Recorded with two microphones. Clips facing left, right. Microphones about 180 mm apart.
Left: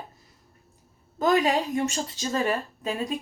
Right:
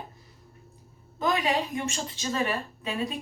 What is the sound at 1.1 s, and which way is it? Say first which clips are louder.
A woman's voice: left 4 dB; 45° left (ahead or behind).